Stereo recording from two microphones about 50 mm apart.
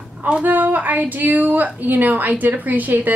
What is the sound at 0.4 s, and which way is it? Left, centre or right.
Speech, right.